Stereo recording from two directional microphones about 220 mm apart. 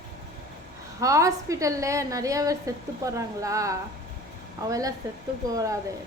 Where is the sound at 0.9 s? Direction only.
15° right (ahead or behind).